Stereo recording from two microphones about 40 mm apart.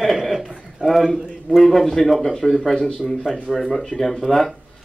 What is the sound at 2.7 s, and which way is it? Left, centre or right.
Speech, centre.